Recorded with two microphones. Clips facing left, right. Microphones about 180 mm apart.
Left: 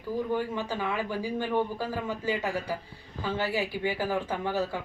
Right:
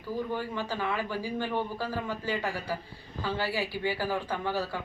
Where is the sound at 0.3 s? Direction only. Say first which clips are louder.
Left 2 dB; 15° left (ahead or behind).